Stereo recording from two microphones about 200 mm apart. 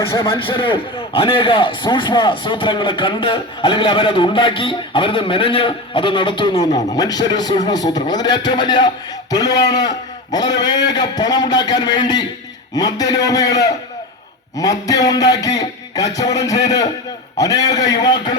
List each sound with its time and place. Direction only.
0.3 s a man's voice: 25° left (ahead or behind)
12.7 s music: 20° left (ahead or behind)
17.3 s a man's voice: 15° left (ahead or behind)